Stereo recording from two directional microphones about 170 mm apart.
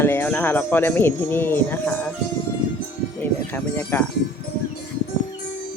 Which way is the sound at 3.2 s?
10° left (ahead or behind).